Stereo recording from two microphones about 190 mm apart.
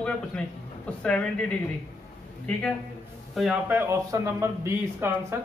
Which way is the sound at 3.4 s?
Centre (ahead or behind).